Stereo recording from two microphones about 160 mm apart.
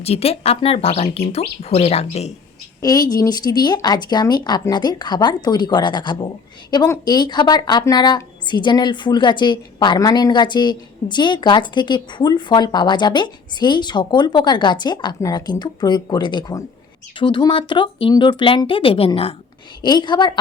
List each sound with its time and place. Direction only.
0.0 s speech: 40° left (ahead or behind)
2.8 s speech: 25° left (ahead or behind)
19.8 s speech: 25° left (ahead or behind)